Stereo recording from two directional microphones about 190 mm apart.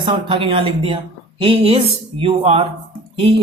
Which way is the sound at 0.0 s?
25° right (ahead or behind).